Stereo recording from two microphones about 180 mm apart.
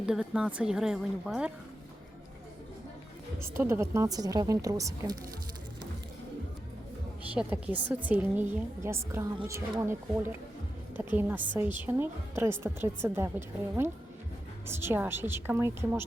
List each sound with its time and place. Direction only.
0.0 s a woman's voice: 5° right (ahead or behind)
3.6 s a woman's voice: 15° right (ahead or behind)
7.3 s a woman's voice: 10° right (ahead or behind)